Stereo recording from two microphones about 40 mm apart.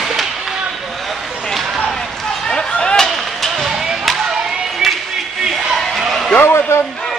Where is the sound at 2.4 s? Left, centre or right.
Left.